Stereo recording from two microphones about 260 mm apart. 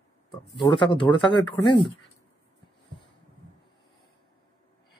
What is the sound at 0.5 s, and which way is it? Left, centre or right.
Speech, centre.